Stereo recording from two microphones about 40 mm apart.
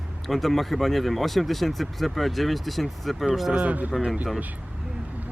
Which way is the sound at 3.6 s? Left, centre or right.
Right.